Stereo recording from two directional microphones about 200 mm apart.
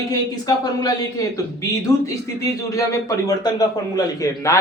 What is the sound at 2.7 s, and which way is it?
A man's voice, 15° left (ahead or behind).